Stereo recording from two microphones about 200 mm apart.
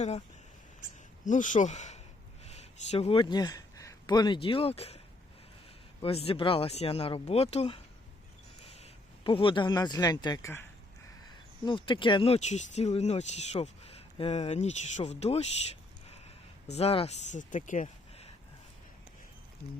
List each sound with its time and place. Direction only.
1.2 s speech: 40° left (ahead or behind)
6.0 s speech: 30° left (ahead or behind); by 10.7 s 10° left (ahead or behind)
11.3 s speech: 25° left (ahead or behind)
16.7 s speech: 30° left (ahead or behind)